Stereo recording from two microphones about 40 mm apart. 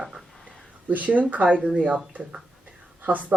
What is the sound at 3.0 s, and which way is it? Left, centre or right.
Speech, right.